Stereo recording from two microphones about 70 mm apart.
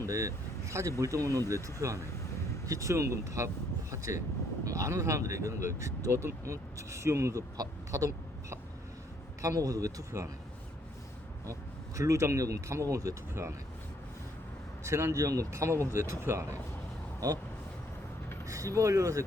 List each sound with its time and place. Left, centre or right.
0.0 s speech: right
4.6 s speech: right
7.5 s speech: right
11.9 s speech: right
14.8 s speech: right
18.4 s speech: right